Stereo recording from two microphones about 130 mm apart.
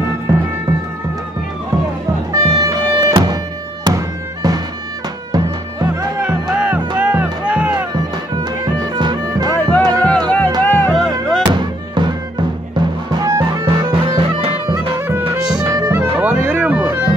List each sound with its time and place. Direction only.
2.3 s music: 30° right (ahead or behind)
6.5 s music: 10° right (ahead or behind)
8.9 s music: 35° right (ahead or behind)
9.6 s music: 15° left (ahead or behind)
11.0 s music: 5° left (ahead or behind)
11.4 s music: 35° right (ahead or behind)
13.7 s music: 40° right (ahead or behind)
15.0 s music: 15° right (ahead or behind)
16.0 s music: 15° right (ahead or behind)